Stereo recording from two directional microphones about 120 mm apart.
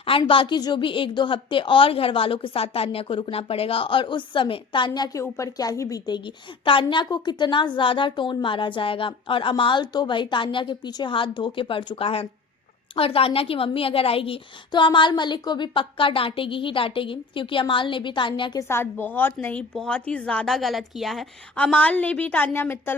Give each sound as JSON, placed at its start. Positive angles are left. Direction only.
{"t": 0.0, "sound": "a woman's voice", "side_deg": 50}
{"t": 4.9, "sound": "a woman's voice", "side_deg": 30}
{"t": 18.7, "sound": "a woman's voice", "side_deg": 20}
{"t": 19.7, "sound": "a woman's voice", "side_deg": 5}